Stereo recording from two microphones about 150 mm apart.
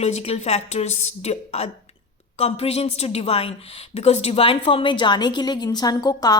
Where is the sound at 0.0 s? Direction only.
45° left (ahead or behind).